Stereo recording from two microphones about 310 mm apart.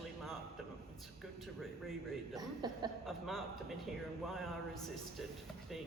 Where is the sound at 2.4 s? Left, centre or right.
Centre.